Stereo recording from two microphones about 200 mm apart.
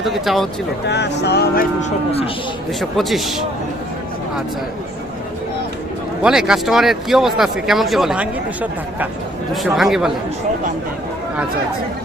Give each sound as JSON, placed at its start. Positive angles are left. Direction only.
{"t": 0.0, "sound": "speech", "side_deg": 0}
{"t": 0.9, "sound": "speech", "side_deg": 60}
{"t": 1.8, "sound": "speech", "side_deg": 30}
{"t": 3.0, "sound": "speech", "side_deg": 0}
{"t": 6.2, "sound": "speech", "side_deg": -5}